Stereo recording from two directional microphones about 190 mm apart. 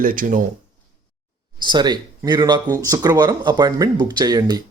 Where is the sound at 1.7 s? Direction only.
20° right (ahead or behind).